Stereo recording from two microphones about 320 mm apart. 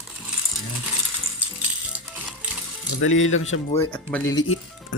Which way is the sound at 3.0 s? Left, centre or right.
Left.